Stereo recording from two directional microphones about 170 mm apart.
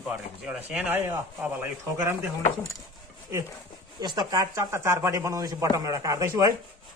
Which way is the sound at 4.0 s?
25° right (ahead or behind).